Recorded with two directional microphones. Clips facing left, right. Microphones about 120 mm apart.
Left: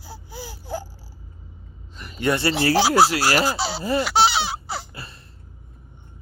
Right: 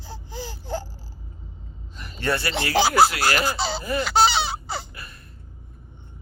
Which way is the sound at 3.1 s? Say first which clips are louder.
Left 3 dB; 30° left (ahead or behind).